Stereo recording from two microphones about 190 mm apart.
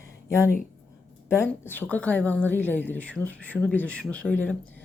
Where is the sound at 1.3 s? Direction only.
10° left (ahead or behind).